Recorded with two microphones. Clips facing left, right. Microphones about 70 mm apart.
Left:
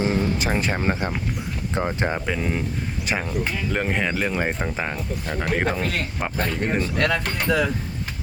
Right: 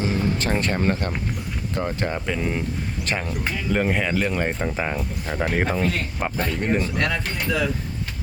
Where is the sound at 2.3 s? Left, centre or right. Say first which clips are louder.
Even; centre.